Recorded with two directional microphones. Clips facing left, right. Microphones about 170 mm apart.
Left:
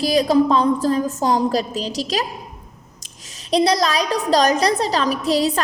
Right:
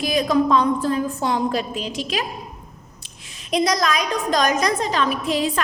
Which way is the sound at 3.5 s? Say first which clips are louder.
Left 3 dB; 35° left (ahead or behind).